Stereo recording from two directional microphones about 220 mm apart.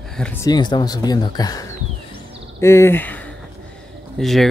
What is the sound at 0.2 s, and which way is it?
Speech, 10° left (ahead or behind).